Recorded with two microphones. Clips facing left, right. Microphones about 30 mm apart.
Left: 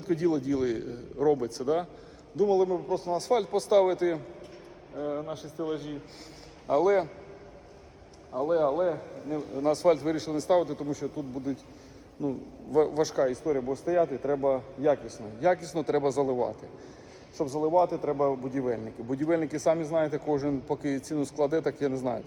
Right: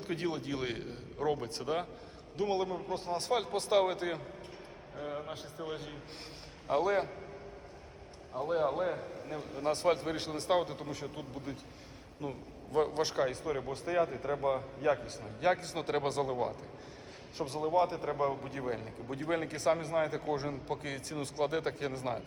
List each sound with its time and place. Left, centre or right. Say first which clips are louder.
0.0 s a man's voice: left 9 dB; right
4.9 s a man's voice: left 7 dB; centre
6.7 s a man's voice: left 6 dB; centre
8.4 s a man's voice: left 6 dB; centre
10.2 s a man's voice: left 6 dB; right
12.9 s a man's voice: left 6 dB; right
13.8 s a man's voice: left 5 dB; right
17.3 s a man's voice: left 6 dB; right